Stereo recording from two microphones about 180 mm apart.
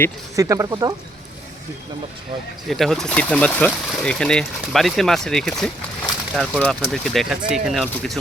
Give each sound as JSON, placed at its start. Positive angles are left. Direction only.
{"t": 0.3, "sound": "speech", "side_deg": -15}
{"t": 2.6, "sound": "speech", "side_deg": 0}